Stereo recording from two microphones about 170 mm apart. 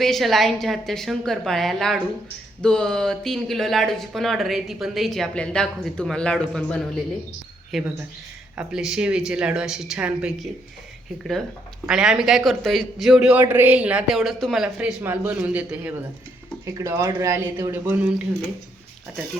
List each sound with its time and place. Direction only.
0.0 s speech: centre (ahead or behind)